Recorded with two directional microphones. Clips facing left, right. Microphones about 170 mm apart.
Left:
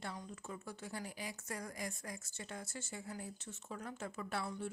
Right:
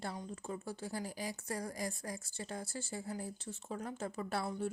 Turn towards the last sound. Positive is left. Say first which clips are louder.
# right 4 dB
turn(degrees=-35)  # may be behind; listen again after turning